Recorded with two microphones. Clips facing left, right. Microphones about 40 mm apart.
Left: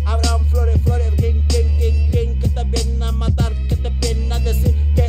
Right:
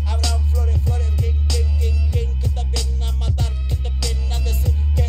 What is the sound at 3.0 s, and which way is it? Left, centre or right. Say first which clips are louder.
Music: left 5 dB; left.